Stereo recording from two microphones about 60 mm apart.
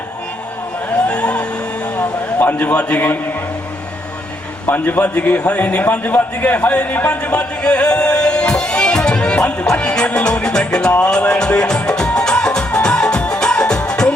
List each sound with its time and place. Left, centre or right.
1.0 s music: left
2.0 s a sound: left
4.6 s a man's voice: left; by 10.1 s centre
10.1 s music: centre